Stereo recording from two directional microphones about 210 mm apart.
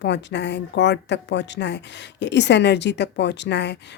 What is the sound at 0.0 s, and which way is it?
Speech, 55° left (ahead or behind).